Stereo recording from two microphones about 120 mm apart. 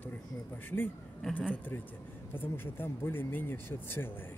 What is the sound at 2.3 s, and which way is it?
Speech, 20° left (ahead or behind).